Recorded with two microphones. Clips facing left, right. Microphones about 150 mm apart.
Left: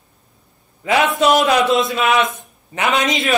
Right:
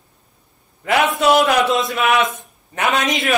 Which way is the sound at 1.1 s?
20° left (ahead or behind).